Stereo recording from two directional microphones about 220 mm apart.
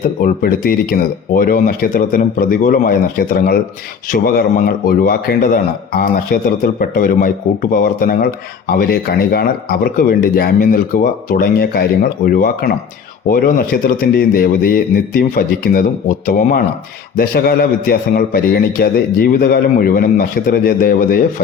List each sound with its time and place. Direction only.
0.2 s speech: 40° left (ahead or behind)